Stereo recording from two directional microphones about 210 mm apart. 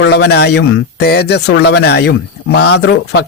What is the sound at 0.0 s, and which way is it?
Speech, 50° left (ahead or behind).